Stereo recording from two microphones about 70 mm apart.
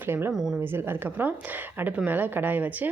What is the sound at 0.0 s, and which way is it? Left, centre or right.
Speech, right.